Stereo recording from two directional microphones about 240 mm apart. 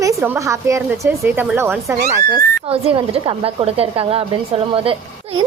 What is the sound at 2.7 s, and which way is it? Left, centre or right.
Speech, right.